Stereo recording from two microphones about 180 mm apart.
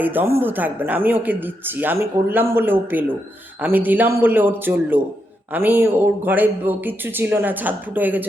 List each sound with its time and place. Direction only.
0.0 s speech: 10° right (ahead or behind)